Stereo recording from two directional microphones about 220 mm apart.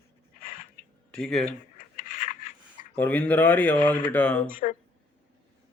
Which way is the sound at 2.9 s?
5° left (ahead or behind).